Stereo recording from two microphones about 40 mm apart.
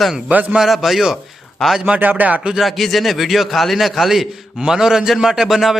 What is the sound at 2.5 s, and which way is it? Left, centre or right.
A man's voice, centre.